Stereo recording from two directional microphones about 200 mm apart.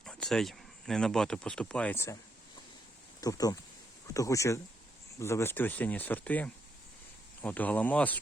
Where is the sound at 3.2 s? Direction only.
20° left (ahead or behind).